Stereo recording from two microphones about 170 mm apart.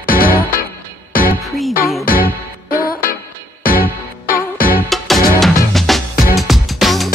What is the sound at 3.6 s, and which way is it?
Music, 60° left (ahead or behind).